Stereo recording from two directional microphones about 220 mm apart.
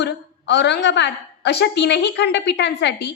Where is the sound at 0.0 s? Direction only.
50° left (ahead or behind).